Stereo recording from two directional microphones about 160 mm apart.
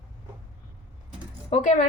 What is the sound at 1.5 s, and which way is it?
Speech, 50° left (ahead or behind).